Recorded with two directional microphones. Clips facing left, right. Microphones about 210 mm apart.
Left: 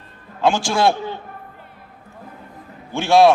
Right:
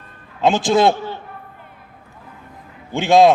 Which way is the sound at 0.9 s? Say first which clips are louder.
Left 1 dB; 15° left (ahead or behind).